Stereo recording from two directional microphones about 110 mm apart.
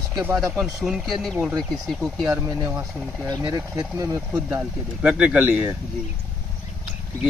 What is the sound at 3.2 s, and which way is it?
Speech, 35° right (ahead or behind).